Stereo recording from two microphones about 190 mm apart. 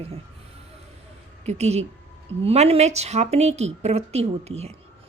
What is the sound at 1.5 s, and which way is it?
A woman's voice, 35° right (ahead or behind).